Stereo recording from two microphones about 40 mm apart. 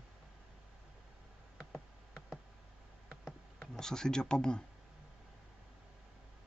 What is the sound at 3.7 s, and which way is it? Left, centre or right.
Speech, centre.